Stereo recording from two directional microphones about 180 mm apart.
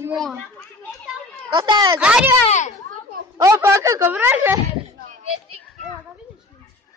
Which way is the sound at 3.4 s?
15° right (ahead or behind).